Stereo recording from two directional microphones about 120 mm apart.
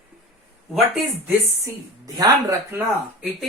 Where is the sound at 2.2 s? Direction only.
30° right (ahead or behind).